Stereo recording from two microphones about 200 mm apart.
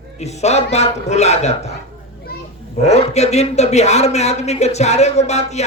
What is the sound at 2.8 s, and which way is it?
Speech, 35° left (ahead or behind).